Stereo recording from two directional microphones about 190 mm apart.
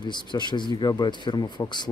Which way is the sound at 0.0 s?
25° left (ahead or behind).